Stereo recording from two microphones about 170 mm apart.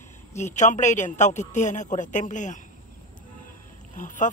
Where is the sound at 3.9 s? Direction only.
50° left (ahead or behind).